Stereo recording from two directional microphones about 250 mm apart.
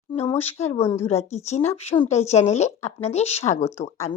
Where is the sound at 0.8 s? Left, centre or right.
Centre.